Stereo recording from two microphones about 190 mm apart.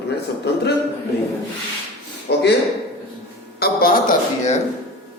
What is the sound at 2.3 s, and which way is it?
Speech, 60° left (ahead or behind).